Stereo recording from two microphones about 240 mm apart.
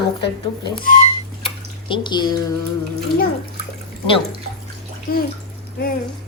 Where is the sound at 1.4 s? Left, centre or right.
Centre.